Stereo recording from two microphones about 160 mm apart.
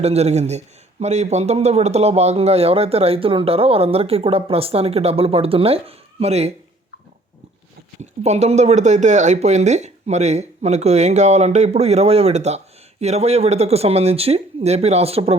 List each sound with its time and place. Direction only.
0.0 s a man's voice: 40° right (ahead or behind)
8.2 s speech: 45° right (ahead or behind)